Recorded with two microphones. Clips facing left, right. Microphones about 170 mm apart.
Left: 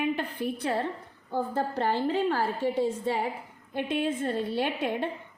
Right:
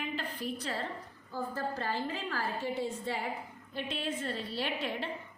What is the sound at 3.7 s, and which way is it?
A woman's voice, 50° left (ahead or behind).